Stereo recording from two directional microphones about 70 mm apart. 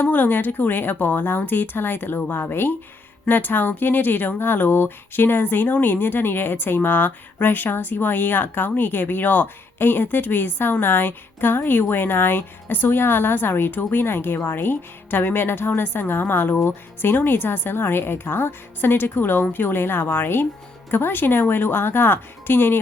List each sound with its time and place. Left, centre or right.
0.0 s a woman's voice: left